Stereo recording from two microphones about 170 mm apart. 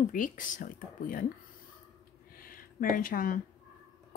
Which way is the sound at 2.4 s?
55° left (ahead or behind).